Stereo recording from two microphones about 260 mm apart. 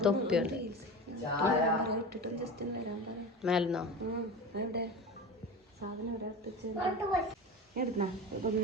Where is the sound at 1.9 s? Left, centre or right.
Right.